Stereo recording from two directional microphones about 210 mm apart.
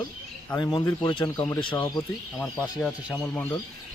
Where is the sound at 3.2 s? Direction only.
10° left (ahead or behind).